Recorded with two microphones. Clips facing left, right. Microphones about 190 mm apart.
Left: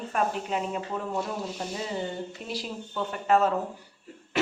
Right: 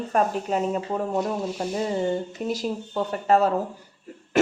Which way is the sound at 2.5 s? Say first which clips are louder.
Right 8 dB; 40° right (ahead or behind).